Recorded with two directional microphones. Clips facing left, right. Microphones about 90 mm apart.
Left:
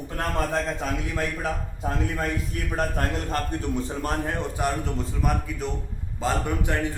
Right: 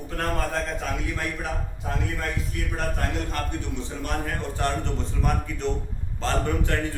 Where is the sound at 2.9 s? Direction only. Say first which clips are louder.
Left 2 dB; 40° left (ahead or behind).